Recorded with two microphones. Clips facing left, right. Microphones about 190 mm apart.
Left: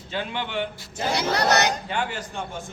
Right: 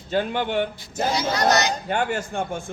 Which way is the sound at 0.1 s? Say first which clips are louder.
Right 6 dB; 45° right (ahead or behind).